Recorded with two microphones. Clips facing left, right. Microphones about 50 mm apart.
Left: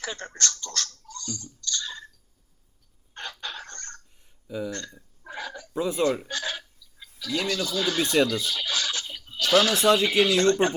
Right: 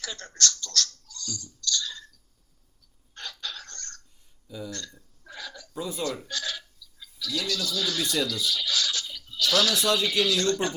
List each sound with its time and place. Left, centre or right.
0.0 s speech: left
3.2 s a sound: left
4.4 s speech: left